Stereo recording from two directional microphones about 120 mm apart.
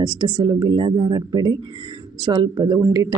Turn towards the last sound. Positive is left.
turn(degrees=-30)  # may be behind; listen again after turning